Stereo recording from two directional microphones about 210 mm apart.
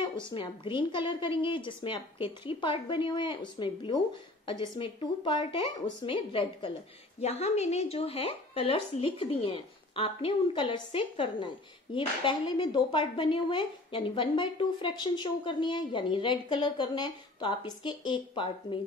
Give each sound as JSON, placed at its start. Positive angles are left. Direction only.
{"t": 0.3, "sound": "a woman's voice", "side_deg": 20}